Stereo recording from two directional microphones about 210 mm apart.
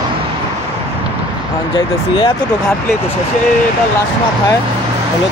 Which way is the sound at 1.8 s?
25° left (ahead or behind).